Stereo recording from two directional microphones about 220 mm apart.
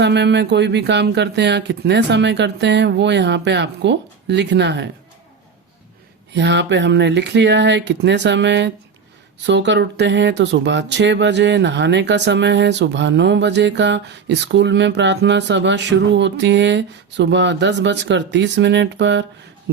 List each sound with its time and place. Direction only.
0.0 s speech: 50° right (ahead or behind)
6.3 s speech: 50° right (ahead or behind)
19.7 s a sound: 55° right (ahead or behind)